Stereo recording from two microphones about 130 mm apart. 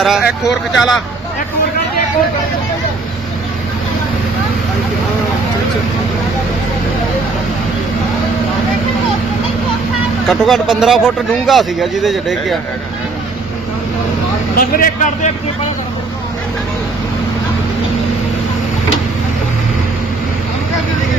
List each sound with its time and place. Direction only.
0.0 s speech: 5° right (ahead or behind)
10.2 s speech: centre (ahead or behind)
14.5 s a man's voice: 90° left